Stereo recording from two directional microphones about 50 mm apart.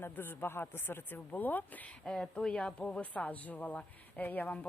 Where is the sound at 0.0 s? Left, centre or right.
Left.